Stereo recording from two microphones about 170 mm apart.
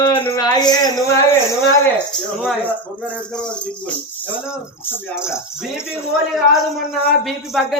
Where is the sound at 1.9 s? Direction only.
10° left (ahead or behind).